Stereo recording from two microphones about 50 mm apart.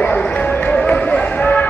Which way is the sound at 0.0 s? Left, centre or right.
Left.